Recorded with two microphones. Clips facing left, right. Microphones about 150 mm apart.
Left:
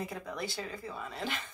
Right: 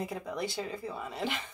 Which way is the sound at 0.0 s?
20° right (ahead or behind).